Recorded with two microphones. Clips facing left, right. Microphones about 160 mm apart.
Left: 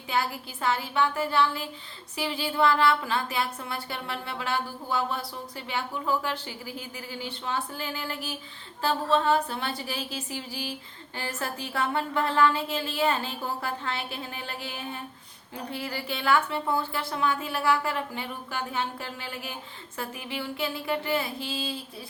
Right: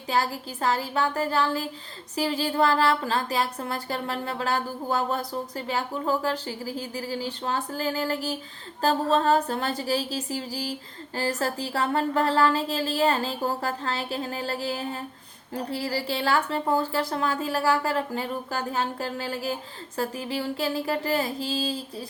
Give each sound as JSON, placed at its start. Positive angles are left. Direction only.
{"t": 0.1, "sound": "a woman's voice", "side_deg": -35}